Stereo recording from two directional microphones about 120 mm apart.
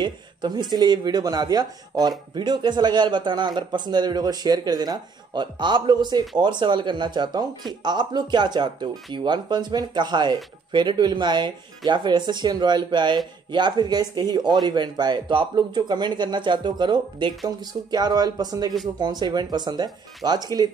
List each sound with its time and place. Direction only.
0.0 s speech: 40° right (ahead or behind)